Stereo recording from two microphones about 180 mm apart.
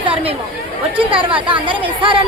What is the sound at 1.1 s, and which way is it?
A woman's voice, 30° right (ahead or behind).